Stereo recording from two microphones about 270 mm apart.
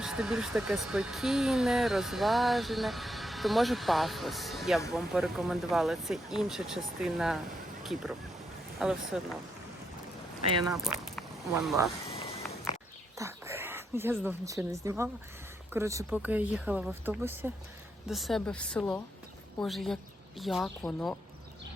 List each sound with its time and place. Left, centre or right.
0.0 s speech: centre
8.8 s speech: centre
10.7 s speech: centre
12.0 s a sound: left
13.1 s a sound: centre
14.3 s speech: centre